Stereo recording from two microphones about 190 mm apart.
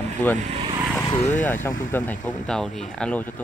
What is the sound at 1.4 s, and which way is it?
Speech, 10° left (ahead or behind).